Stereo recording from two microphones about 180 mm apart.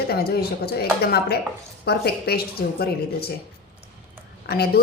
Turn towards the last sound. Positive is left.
turn(degrees=60)  # may be behind; listen again after turning